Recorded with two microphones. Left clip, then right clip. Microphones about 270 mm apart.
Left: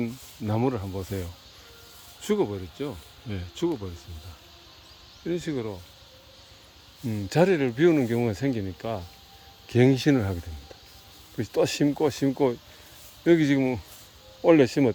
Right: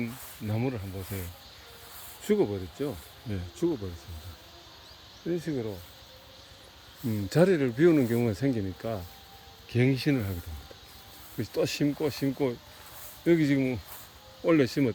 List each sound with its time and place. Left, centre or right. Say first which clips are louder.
0.0 s speech: left 4 dB; centre
2.2 s speech: left 1 dB; centre
5.3 s speech: left 2 dB; centre
7.1 s speech: left 2 dB; centre
9.7 s speech: left 6 dB; centre
11.3 s speech: left 5 dB; centre